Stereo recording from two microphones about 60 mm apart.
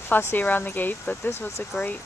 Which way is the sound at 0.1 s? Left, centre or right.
Left.